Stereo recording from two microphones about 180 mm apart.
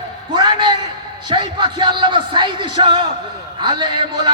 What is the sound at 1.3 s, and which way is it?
A man's voice, 25° right (ahead or behind).